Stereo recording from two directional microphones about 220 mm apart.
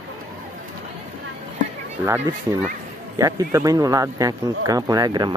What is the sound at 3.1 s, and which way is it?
Speech, 15° right (ahead or behind).